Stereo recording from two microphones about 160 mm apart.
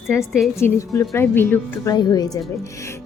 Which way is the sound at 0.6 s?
20° left (ahead or behind).